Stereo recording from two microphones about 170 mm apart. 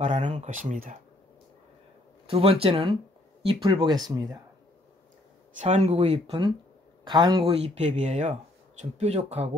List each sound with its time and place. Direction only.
0.0 s speech: 45° right (ahead or behind)
2.2 s speech: 35° right (ahead or behind)
5.6 s speech: 40° right (ahead or behind)